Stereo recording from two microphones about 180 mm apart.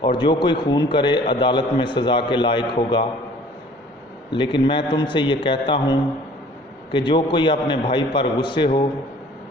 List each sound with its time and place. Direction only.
0.0 s a man's voice: 25° left (ahead or behind)
4.3 s a man's voice: 25° left (ahead or behind)